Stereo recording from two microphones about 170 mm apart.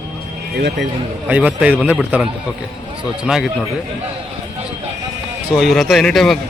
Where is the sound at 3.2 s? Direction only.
5° right (ahead or behind).